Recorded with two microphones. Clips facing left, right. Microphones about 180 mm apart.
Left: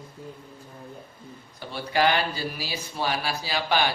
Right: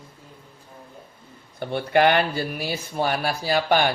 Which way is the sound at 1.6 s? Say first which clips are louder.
Right 5 dB; 55° right (ahead or behind).